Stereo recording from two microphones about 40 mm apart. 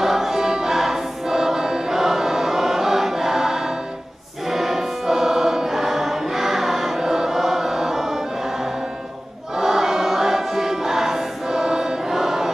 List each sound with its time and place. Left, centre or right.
0.0 s choir: centre
4.5 s music: centre
9.6 s choir: centre